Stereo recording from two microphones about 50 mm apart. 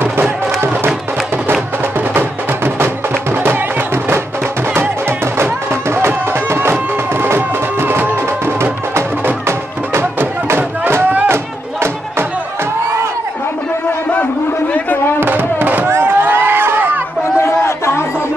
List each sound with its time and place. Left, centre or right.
0.0 s crowd: right
2.1 s music: right
6.0 s music: right
6.7 s music: right
15.1 s a sound: right
15.9 s crowd: right
17.4 s a sound: left